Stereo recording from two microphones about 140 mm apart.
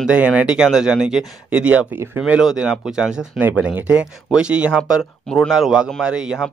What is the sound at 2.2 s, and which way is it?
A man's voice, 5° right (ahead or behind).